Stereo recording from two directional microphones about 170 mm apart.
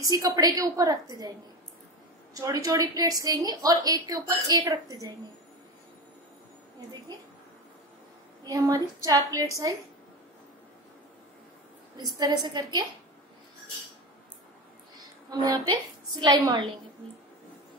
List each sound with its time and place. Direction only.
0.0 s a woman's voice: 20° right (ahead or behind)
2.3 s a woman's voice: 20° right (ahead or behind)
8.5 s a woman's voice: 20° right (ahead or behind)
12.0 s a woman's voice: 25° right (ahead or behind)
15.0 s a woman's voice: 20° right (ahead or behind)